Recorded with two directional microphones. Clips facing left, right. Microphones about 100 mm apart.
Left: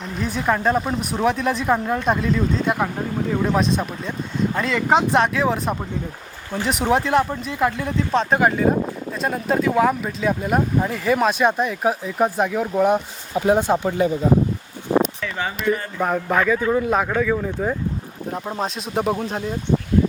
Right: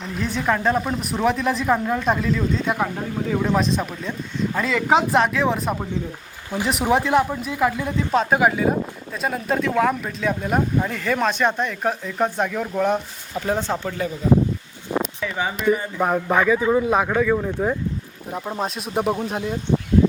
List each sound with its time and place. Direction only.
0.2 s speech: 5° left (ahead or behind)
15.2 s speech: 10° right (ahead or behind)